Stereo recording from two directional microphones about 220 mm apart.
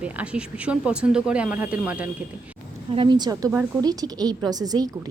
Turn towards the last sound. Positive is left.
turn(degrees=-15)  # may be behind; listen again after turning